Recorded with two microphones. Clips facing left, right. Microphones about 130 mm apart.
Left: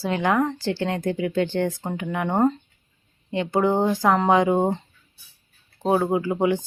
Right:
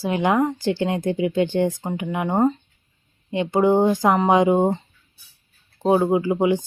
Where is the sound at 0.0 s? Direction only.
15° right (ahead or behind).